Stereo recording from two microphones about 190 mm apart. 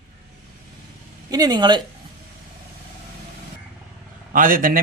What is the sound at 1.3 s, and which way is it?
Speech, 20° right (ahead or behind).